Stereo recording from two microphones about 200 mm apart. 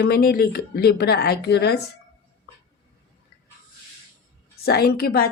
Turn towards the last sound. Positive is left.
turn(degrees=50)  # may be behind; listen again after turning